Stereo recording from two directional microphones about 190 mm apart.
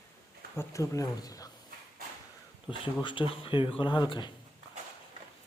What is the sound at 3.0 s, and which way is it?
Speech, 25° left (ahead or behind).